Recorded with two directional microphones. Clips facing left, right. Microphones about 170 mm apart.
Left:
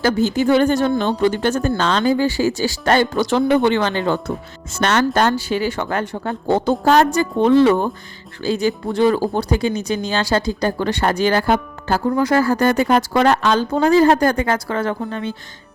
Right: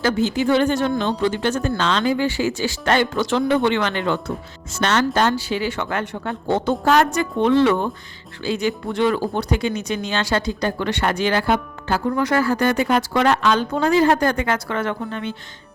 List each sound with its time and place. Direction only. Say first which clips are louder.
0.0 s speech: left 3 dB; 45° left (ahead or behind)
4.8 s speech: left 2 dB; 50° left (ahead or behind)